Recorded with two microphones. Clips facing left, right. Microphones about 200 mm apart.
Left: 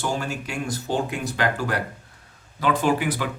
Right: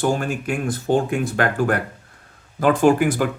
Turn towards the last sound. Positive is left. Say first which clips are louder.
# right 7 dB
turn(degrees=-45)  # may be behind; listen again after turning